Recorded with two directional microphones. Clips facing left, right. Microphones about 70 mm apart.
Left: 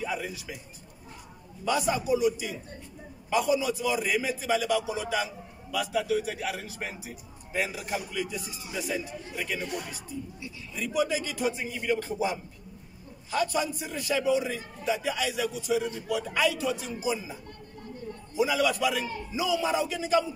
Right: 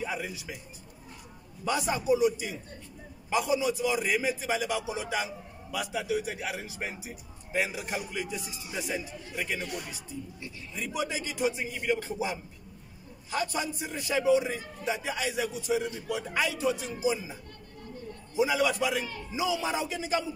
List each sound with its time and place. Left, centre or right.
0.0 s a sound: centre
1.6 s a man's voice: centre
9.4 s a man's voice: centre
13.4 s a man's voice: right